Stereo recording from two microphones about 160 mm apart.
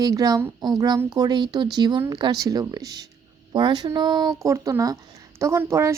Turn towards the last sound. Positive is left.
turn(degrees=-15)  # may be behind; listen again after turning